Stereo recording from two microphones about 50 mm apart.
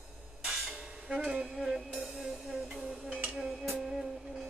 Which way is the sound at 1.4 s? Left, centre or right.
Centre.